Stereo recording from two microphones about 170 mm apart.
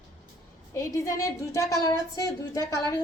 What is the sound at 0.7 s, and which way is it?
A woman's voice, 20° left (ahead or behind).